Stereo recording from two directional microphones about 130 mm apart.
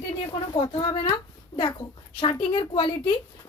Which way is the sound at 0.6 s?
40° left (ahead or behind).